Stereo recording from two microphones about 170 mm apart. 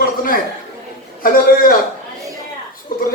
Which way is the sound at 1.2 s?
55° left (ahead or behind).